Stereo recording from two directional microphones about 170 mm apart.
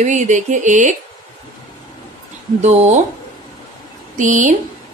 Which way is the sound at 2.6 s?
40° right (ahead or behind).